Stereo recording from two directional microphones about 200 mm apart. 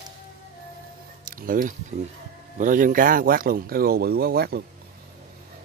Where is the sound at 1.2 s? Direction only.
45° right (ahead or behind).